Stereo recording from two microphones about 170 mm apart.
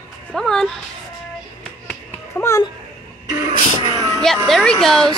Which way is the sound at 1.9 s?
15° left (ahead or behind).